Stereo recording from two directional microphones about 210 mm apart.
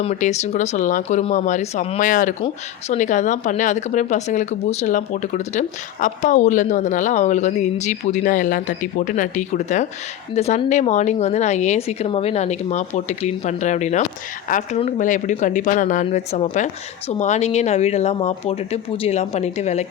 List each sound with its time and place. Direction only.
0.0 s speech: 35° left (ahead or behind)